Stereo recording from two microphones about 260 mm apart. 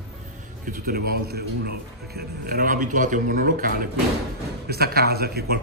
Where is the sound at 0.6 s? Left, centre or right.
Right.